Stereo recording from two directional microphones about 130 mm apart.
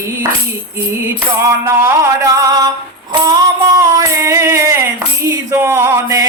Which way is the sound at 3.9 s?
25° right (ahead or behind).